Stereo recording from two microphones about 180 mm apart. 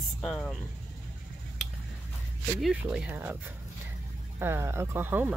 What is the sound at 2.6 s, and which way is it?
Speech, 5° right (ahead or behind).